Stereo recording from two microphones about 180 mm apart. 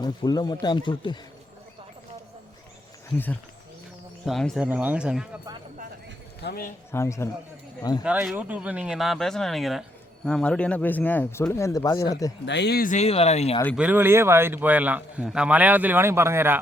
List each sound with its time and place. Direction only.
0.0 s speech: 20° left (ahead or behind)
4.3 s speech: centre (ahead or behind)
6.4 s speech: 60° left (ahead or behind)
6.9 s speech: 15° left (ahead or behind)
8.0 s speech: 5° right (ahead or behind); by 12.3 s 20° left (ahead or behind)
12.5 s speech: 70° left (ahead or behind)
13.0 s speech: 35° left (ahead or behind)
13.7 s a man's voice: 10° right (ahead or behind)